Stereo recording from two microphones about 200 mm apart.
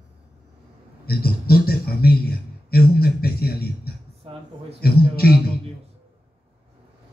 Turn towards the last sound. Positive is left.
turn(degrees=50)  # may be behind; listen again after turning